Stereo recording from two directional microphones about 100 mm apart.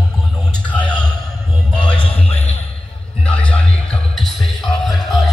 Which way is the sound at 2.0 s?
70° left (ahead or behind).